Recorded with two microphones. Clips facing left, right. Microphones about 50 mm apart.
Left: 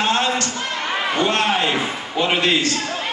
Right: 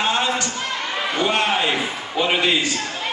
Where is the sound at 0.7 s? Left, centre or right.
Centre.